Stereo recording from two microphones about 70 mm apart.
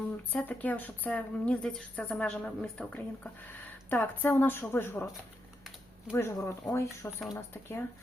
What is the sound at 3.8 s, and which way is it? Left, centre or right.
A woman's voice, left.